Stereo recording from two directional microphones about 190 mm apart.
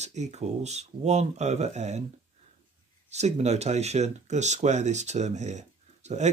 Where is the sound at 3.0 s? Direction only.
35° right (ahead or behind).